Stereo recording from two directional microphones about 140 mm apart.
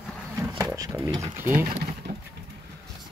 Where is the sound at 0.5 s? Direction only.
25° right (ahead or behind).